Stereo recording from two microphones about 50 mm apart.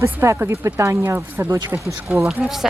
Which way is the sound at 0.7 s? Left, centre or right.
Right.